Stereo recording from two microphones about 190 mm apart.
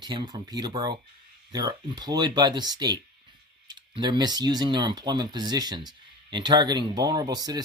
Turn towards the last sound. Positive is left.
turn(degrees=-20)  # may be behind; listen again after turning